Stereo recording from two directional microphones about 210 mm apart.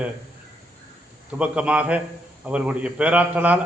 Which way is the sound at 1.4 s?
5° right (ahead or behind).